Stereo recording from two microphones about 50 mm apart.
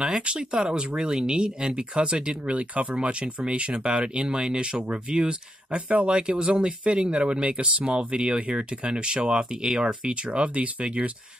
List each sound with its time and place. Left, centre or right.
0.3 s speech: right